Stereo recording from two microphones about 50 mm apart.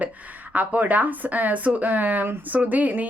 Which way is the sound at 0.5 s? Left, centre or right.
Right.